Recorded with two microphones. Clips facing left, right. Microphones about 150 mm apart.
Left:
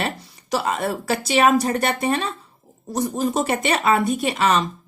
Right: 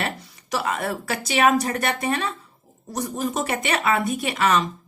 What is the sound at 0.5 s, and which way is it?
A woman's voice, 25° left (ahead or behind).